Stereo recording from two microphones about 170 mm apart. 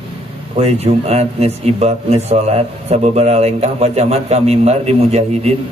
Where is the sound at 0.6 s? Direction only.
40° right (ahead or behind).